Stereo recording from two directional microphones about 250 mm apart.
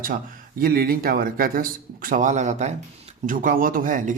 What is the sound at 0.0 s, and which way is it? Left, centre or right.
Speech, right.